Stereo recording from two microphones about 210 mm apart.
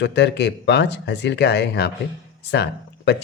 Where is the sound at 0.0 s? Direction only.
55° left (ahead or behind).